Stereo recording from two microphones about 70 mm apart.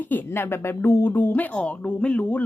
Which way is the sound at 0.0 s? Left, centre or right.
Left.